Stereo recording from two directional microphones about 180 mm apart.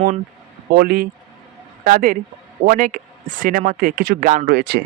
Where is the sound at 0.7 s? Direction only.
55° right (ahead or behind).